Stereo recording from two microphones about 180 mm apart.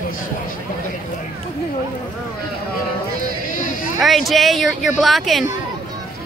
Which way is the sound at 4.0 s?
Centre (ahead or behind).